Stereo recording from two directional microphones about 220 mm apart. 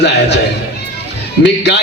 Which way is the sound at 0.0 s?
50° left (ahead or behind).